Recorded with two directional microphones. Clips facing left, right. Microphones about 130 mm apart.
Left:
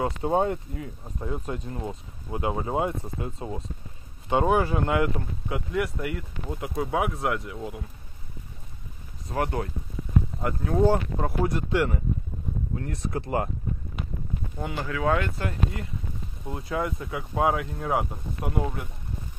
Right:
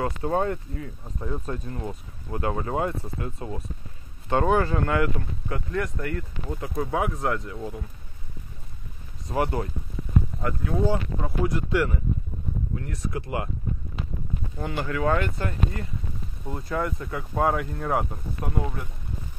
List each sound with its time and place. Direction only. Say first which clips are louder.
0.0 s speech: left 1 dB; 20° left (ahead or behind)
9.3 s speech: right 2 dB; 5° right (ahead or behind)
10.7 s speech: left 4 dB; 55° left (ahead or behind)
11.4 s speech: right 2 dB; 25° left (ahead or behind)
14.8 s speech: right 1 dB; centre (ahead or behind)